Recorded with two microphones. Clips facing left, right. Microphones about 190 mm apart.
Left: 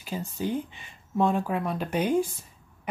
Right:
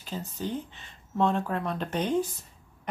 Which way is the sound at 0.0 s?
10° left (ahead or behind).